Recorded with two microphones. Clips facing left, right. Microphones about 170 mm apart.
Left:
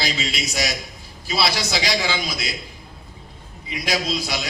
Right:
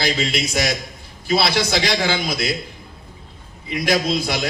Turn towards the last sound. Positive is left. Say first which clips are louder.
# right 5 dB
turn(degrees=-55)  # may be behind; listen again after turning